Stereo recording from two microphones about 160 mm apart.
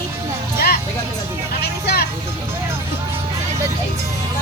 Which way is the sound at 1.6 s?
90° left.